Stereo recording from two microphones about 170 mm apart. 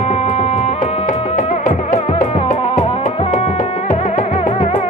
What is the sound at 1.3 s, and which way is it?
Music, 50° left (ahead or behind).